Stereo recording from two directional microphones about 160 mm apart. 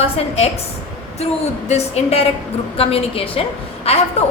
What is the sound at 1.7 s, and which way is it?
A woman's voice, 40° left (ahead or behind).